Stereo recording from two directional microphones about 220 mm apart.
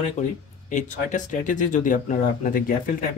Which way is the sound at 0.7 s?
35° left (ahead or behind).